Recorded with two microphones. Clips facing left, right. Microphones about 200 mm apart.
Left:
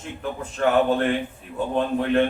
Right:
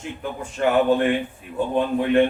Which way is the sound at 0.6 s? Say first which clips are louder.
Right 1 dB; 10° right (ahead or behind).